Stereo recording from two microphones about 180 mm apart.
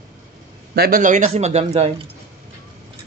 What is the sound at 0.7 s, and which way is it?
Speech, 55° right (ahead or behind).